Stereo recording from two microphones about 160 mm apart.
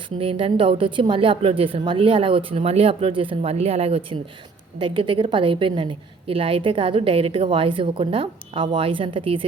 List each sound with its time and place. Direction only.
0.2 s a woman's voice: 35° right (ahead or behind)